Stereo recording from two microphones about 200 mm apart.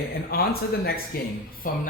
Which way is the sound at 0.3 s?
50° left (ahead or behind).